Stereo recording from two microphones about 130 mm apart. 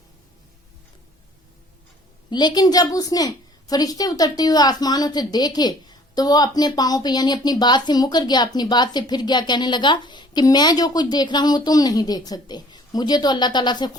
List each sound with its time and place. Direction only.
2.3 s a woman's voice: 30° left (ahead or behind)